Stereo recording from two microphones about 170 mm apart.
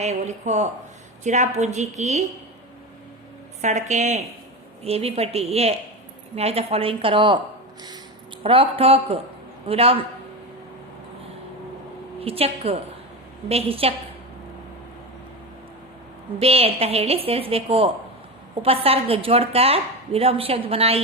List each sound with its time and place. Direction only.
0.0 s a woman's voice: 40° right (ahead or behind)
3.6 s a woman's voice: 45° right (ahead or behind)
8.4 s a woman's voice: 30° right (ahead or behind)
12.2 s a woman's voice: 35° right (ahead or behind)
16.4 s a woman's voice: 35° right (ahead or behind)